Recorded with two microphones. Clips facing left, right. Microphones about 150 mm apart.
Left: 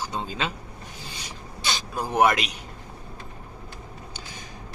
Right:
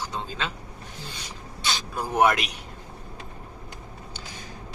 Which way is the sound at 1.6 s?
Centre (ahead or behind).